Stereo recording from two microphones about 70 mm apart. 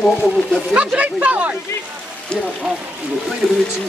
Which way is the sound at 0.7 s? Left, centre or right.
Centre.